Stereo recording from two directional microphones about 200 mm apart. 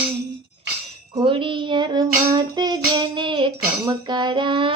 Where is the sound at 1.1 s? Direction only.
25° right (ahead or behind).